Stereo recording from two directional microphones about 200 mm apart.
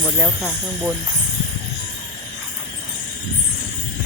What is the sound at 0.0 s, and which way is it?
Speech, 5° right (ahead or behind).